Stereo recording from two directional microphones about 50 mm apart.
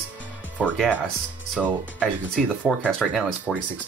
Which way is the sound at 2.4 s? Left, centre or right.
Centre.